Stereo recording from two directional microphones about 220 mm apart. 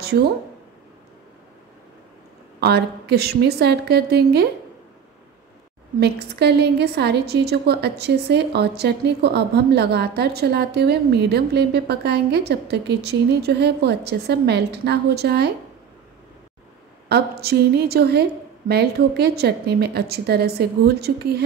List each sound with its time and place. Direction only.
0.0 s speech: 45° right (ahead or behind)
2.6 s a woman's voice: 45° right (ahead or behind)
5.9 s a woman's voice: 45° right (ahead or behind)
17.1 s a woman's voice: 45° right (ahead or behind)